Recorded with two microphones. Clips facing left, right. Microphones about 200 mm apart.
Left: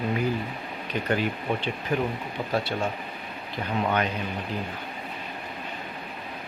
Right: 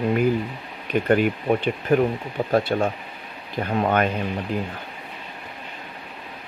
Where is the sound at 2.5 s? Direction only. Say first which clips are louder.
Right 7 dB; 50° right (ahead or behind).